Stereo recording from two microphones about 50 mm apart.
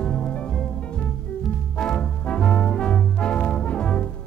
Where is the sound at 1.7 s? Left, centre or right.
Left.